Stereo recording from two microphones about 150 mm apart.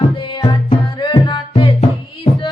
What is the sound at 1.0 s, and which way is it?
Music, 30° left (ahead or behind).